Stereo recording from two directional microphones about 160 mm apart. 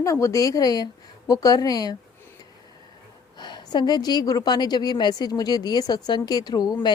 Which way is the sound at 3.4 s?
25° left (ahead or behind).